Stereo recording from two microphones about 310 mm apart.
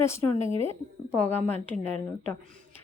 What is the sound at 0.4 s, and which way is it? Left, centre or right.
Speech, centre.